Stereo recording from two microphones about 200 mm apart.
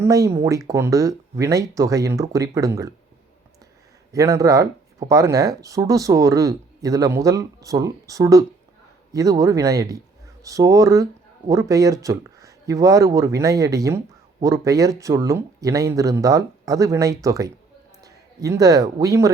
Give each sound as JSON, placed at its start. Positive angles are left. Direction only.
{"t": 0.0, "sound": "speech", "side_deg": -15}
{"t": 4.1, "sound": "a man's voice", "side_deg": -15}